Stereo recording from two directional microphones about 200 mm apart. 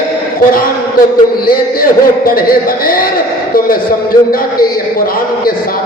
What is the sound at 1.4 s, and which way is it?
A man's voice, 45° left (ahead or behind).